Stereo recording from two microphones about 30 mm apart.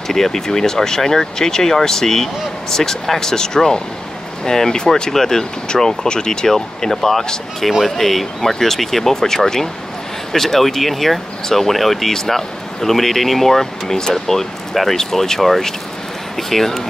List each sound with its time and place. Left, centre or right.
0.1 s speech: centre
5.8 s speech: left
6.5 s speech: centre